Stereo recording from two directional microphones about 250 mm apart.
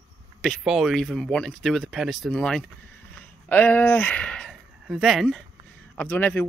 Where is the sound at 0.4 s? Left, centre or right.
Centre.